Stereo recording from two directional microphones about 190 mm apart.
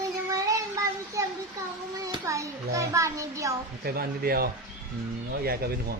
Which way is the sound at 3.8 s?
55° right (ahead or behind).